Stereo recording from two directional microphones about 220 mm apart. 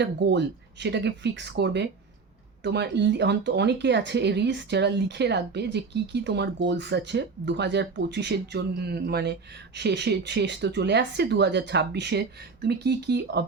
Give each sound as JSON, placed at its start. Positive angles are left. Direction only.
{"t": 0.0, "sound": "speech", "side_deg": -50}